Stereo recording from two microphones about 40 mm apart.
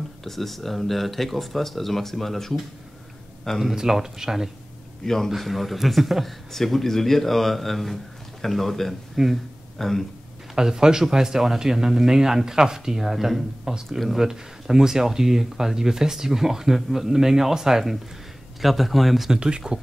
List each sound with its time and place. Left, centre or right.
0.2 s a man's voice: centre
3.7 s speech: centre
5.0 s a man's voice: centre
5.3 s a man's voice: centre
9.8 s speech: centre
10.5 s speech: centre
13.9 s a man's voice: centre
14.2 s a man's voice: centre
19.3 s speech: centre